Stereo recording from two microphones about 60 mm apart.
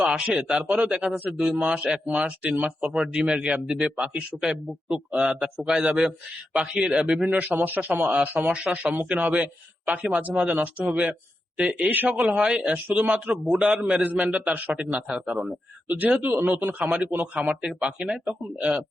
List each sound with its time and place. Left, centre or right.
0.0 s a man's voice: centre
13.4 s a man's voice: centre
13.8 s a man's voice: right; by 15.5 s centre
15.9 s a man's voice: right